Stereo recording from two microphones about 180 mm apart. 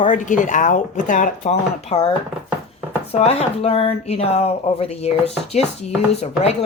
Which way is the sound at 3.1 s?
35° left (ahead or behind).